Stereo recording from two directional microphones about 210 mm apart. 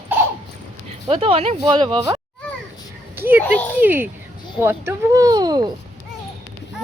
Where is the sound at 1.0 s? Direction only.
30° right (ahead or behind).